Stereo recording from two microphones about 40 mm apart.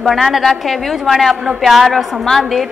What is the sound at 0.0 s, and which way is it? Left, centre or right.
A woman's voice, centre.